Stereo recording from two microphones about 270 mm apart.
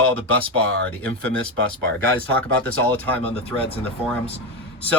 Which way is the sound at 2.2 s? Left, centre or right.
Centre.